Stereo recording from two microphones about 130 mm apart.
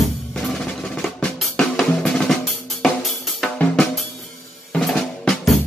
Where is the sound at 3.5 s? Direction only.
10° left (ahead or behind).